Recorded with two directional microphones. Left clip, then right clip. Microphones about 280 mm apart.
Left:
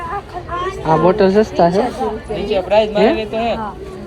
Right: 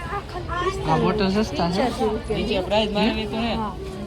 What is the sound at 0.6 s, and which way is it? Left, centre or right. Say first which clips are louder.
A woman's voice: left 8 dB; centre.